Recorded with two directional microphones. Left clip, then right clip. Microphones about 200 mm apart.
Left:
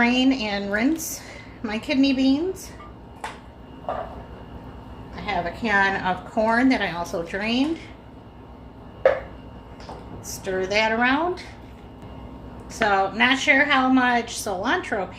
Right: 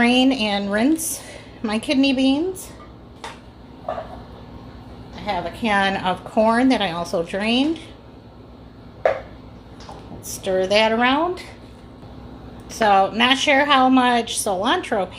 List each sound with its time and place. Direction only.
0.0 s a woman's voice: 40° right (ahead or behind)
5.2 s a woman's voice: 45° right (ahead or behind)
10.2 s a woman's voice: 45° right (ahead or behind)
12.8 s a woman's voice: 45° right (ahead or behind)